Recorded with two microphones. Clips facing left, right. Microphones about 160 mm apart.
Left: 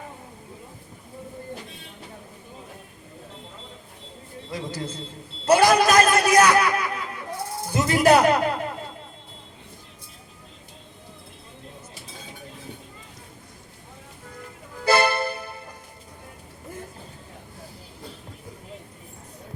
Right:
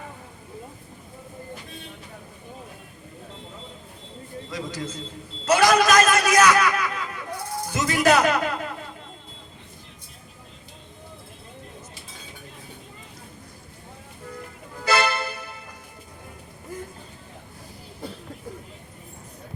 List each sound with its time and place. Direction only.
4.5 s speech: 30° left (ahead or behind)
5.5 s a sound: 30° left (ahead or behind)
7.7 s music: 30° left (ahead or behind)
14.8 s music: 30° left (ahead or behind)